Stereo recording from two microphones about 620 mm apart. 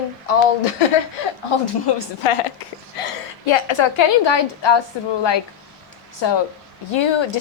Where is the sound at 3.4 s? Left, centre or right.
Left.